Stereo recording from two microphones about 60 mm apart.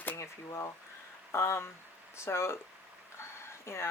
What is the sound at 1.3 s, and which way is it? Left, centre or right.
Speech, left.